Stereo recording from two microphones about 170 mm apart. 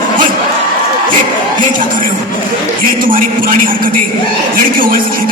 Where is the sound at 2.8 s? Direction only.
55° right (ahead or behind).